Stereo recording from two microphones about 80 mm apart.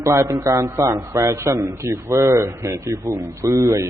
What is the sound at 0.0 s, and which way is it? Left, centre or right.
A man's voice, right.